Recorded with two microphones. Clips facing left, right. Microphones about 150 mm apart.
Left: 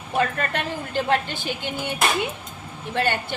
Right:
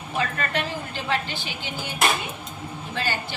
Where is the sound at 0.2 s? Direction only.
50° left (ahead or behind).